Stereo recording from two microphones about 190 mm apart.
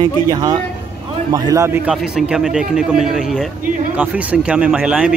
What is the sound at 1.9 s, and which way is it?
A man's voice, centre (ahead or behind).